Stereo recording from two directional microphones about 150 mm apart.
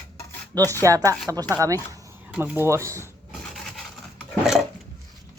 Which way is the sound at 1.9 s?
20° right (ahead or behind).